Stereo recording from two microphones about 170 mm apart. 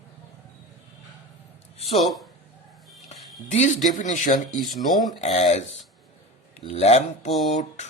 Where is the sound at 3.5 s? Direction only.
45° left (ahead or behind).